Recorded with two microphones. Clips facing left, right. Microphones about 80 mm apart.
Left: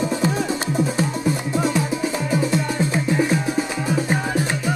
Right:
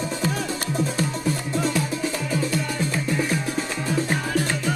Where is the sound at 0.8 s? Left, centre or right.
Centre.